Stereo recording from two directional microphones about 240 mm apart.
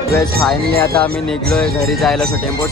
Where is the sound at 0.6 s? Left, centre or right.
Right.